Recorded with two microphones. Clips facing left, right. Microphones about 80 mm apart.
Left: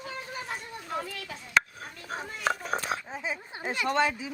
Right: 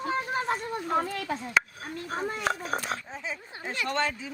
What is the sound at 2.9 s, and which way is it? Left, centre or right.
Speech, centre.